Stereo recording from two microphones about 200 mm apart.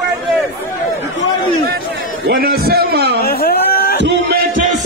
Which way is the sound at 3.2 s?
50° left (ahead or behind).